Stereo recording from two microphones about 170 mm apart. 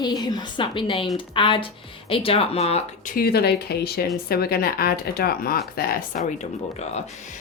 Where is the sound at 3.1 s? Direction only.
65° left (ahead or behind).